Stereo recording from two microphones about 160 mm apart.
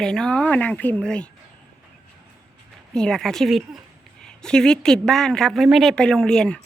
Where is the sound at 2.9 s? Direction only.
5° left (ahead or behind).